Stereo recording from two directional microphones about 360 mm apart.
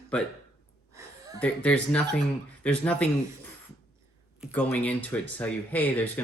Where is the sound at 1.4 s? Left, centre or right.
Centre.